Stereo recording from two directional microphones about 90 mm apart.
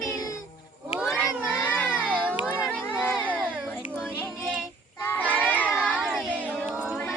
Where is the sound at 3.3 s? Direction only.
15° right (ahead or behind).